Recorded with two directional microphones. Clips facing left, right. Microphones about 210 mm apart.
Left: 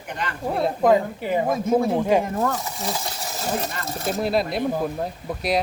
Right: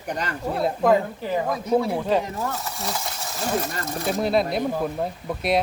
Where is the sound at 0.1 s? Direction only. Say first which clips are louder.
Right 2 dB; 40° right (ahead or behind).